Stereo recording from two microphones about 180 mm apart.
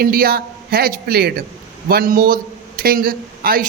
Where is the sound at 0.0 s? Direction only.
55° right (ahead or behind).